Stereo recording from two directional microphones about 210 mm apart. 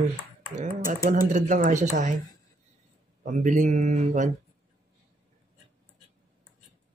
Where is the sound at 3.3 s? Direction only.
35° right (ahead or behind).